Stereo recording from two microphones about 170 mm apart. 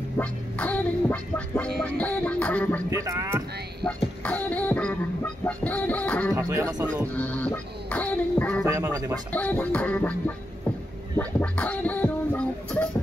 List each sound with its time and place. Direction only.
0.2 s music: 10° left (ahead or behind)
2.9 s speech: 20° right (ahead or behind)
3.8 s music: 10° left (ahead or behind)
6.3 s speech: 20° right (ahead or behind)
7.2 s music: 10° left (ahead or behind)
8.6 s speech: 20° right (ahead or behind)
9.3 s music: 10° left (ahead or behind)